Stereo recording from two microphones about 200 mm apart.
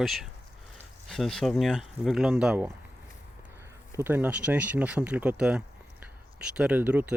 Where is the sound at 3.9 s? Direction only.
10° right (ahead or behind).